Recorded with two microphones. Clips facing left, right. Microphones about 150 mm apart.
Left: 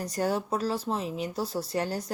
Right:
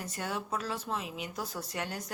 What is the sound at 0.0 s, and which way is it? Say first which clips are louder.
Speech: left 8 dB; 35° left (ahead or behind).